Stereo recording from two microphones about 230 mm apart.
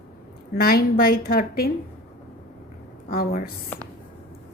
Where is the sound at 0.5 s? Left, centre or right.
Left.